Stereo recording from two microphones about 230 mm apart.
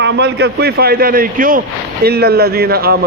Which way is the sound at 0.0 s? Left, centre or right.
Right.